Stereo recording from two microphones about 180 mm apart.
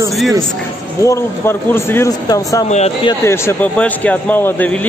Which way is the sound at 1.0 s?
15° left (ahead or behind).